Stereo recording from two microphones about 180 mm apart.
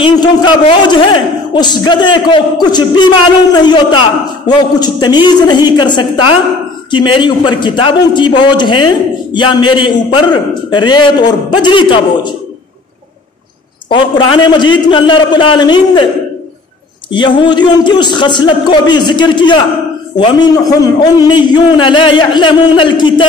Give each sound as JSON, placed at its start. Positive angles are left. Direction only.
{"t": 0.0, "sound": "a man's voice", "side_deg": 25}
{"t": 13.8, "sound": "a man's voice", "side_deg": 25}
{"t": 17.1, "sound": "a man's voice", "side_deg": 25}